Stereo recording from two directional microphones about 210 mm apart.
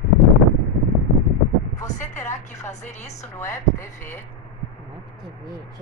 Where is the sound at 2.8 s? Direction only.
35° left (ahead or behind).